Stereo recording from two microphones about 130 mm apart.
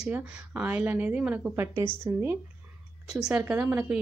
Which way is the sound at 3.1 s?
5° right (ahead or behind).